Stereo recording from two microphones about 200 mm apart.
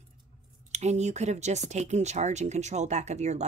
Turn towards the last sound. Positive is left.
turn(degrees=-35)  # may be behind; listen again after turning